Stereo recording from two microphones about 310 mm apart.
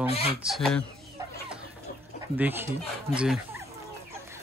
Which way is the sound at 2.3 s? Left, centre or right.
Centre.